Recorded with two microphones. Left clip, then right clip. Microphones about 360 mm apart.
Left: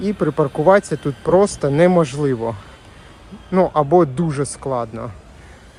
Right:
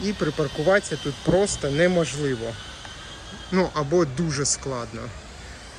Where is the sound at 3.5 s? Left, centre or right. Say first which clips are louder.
Left 8 dB; centre.